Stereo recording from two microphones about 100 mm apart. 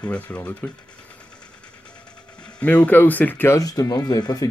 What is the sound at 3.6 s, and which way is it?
Speech, 40° left (ahead or behind).